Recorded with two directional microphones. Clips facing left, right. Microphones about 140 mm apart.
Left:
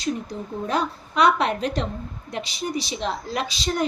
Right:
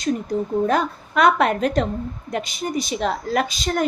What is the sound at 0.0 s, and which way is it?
A woman's voice, 50° right (ahead or behind).